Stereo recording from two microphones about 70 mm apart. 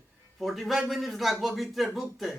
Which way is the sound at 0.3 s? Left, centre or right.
Centre.